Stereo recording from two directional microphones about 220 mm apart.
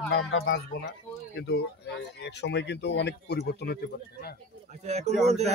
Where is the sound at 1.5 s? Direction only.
50° left (ahead or behind).